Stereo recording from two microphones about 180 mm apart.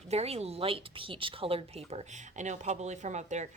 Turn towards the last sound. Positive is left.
turn(degrees=-40)  # may be behind; listen again after turning